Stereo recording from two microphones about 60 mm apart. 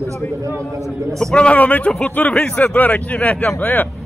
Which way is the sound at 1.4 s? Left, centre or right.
Left.